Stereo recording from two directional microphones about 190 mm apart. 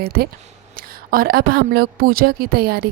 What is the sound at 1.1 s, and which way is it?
A woman's voice, 50° right (ahead or behind).